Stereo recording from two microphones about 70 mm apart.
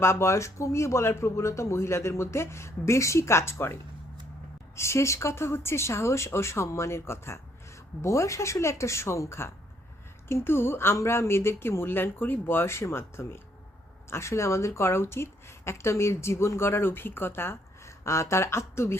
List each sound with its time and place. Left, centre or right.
0.0 s a woman's voice: left